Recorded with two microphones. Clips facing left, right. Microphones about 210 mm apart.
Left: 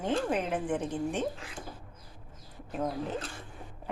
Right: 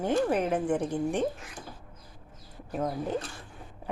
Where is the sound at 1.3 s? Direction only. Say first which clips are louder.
Left 1 dB; 30° left (ahead or behind).